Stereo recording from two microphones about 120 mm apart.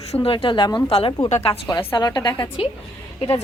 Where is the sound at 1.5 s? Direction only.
40° left (ahead or behind).